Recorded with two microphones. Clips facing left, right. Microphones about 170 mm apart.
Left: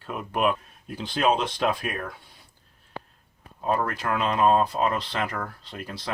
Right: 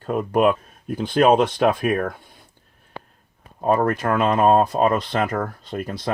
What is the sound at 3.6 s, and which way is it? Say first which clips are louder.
Speech: right 7 dB; 50° right (ahead or behind).